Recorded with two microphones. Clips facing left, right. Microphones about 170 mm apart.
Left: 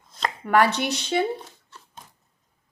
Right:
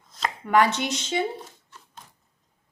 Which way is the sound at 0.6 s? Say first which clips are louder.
Left 2 dB; 65° left (ahead or behind).